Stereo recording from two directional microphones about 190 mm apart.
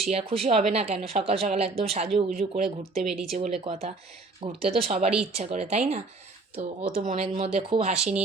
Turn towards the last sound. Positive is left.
turn(degrees=-35)  # may be behind; listen again after turning